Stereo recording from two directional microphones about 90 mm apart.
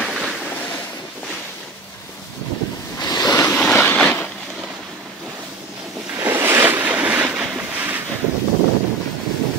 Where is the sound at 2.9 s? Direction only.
45° left (ahead or behind).